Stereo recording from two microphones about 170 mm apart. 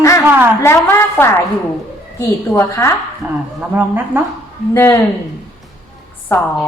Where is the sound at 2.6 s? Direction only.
15° left (ahead or behind).